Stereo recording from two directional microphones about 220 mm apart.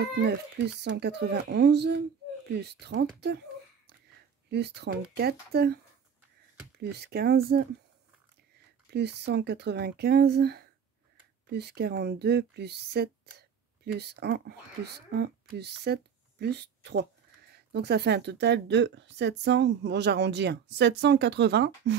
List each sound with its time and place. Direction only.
0.8 s a woman's voice: 50° right (ahead or behind)
4.5 s a woman's voice: 50° right (ahead or behind)
6.8 s a woman's voice: 50° right (ahead or behind)
8.9 s a woman's voice: 50° right (ahead or behind)